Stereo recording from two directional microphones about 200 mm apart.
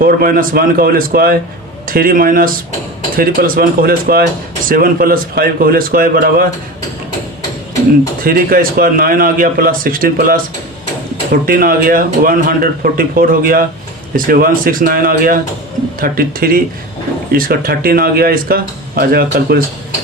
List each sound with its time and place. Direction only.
0.0 s speech: 45° right (ahead or behind)
8.2 s speech: 45° right (ahead or behind)
11.4 s speech: 45° right (ahead or behind)